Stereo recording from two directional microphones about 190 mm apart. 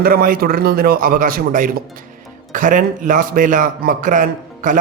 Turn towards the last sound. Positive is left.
turn(degrees=-45)  # may be behind; listen again after turning